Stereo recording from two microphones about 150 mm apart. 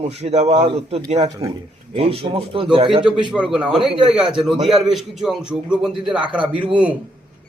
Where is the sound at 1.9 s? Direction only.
40° right (ahead or behind).